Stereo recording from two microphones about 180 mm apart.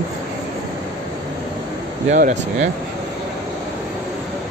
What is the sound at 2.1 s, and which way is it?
Speech, 45° right (ahead or behind).